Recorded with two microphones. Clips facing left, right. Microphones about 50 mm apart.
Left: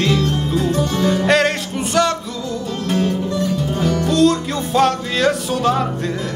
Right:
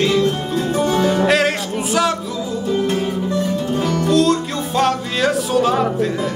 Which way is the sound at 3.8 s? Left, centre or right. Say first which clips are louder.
Left 1 dB; centre.